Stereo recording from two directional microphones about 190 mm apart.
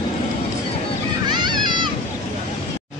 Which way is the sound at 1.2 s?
25° right (ahead or behind).